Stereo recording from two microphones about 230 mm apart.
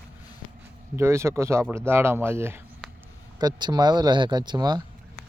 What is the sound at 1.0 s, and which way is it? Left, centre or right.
Speech, centre.